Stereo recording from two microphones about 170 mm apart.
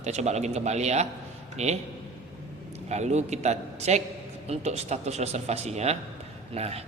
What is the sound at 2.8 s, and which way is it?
A man's voice, 40° right (ahead or behind).